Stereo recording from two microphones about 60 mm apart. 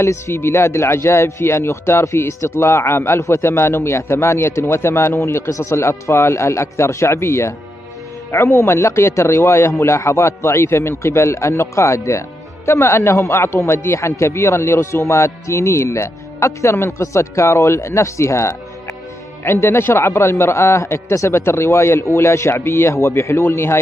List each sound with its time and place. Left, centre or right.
0.0 s a man's voice: left